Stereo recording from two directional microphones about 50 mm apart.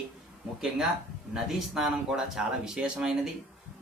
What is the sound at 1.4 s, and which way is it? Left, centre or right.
Speech, centre.